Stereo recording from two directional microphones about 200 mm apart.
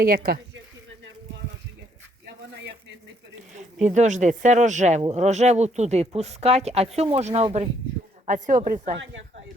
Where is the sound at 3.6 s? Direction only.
35° right (ahead or behind).